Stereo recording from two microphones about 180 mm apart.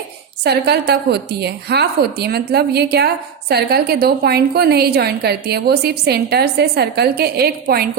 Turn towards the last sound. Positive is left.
turn(degrees=-60)  # may be behind; listen again after turning